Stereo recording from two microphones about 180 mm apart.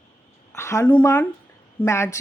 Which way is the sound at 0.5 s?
15° left (ahead or behind).